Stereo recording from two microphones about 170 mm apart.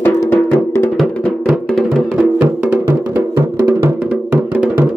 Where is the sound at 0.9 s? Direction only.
Centre (ahead or behind).